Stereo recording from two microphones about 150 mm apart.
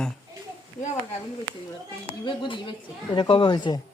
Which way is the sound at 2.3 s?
35° left (ahead or behind).